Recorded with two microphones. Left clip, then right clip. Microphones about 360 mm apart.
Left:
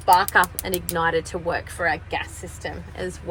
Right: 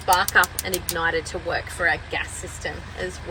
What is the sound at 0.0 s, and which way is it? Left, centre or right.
Speech, left.